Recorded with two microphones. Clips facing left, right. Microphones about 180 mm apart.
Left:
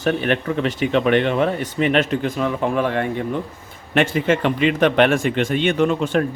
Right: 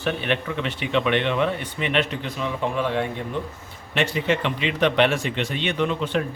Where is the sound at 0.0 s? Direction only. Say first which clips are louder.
Left 5 dB; 45° left (ahead or behind).